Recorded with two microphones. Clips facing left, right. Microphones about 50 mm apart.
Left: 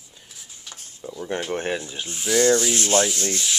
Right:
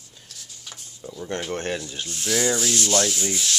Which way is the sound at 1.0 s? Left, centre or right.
Centre.